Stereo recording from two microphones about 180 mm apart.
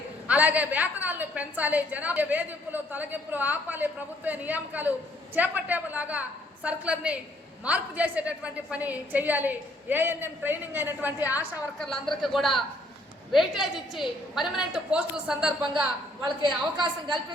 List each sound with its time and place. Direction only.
0.3 s a woman's voice: 10° right (ahead or behind)
11.8 s a woman's voice: centre (ahead or behind)
16.2 s a woman's voice: 25° right (ahead or behind)